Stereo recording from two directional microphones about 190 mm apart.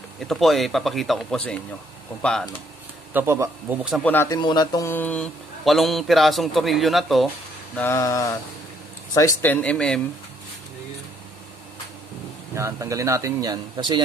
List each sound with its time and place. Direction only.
0.2 s speech: centre (ahead or behind)
3.1 s speech: 10° right (ahead or behind)
4.0 s speech: 10° left (ahead or behind)
7.7 s speech: 10° left (ahead or behind)
12.5 s speech: 15° right (ahead or behind)